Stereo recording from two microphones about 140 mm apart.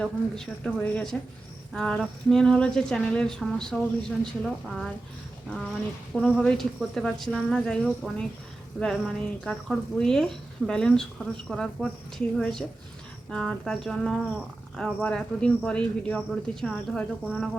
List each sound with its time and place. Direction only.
0.0 s a woman's voice: 5° left (ahead or behind)